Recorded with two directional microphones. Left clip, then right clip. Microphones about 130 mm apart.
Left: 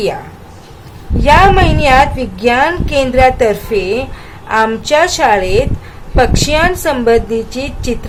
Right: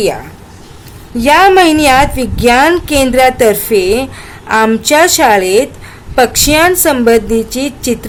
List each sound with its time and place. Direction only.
1.2 s a woman's voice: 60° right (ahead or behind)